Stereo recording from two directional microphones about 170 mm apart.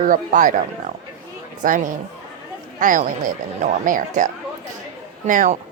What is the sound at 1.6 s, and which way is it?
Speech, 50° right (ahead or behind).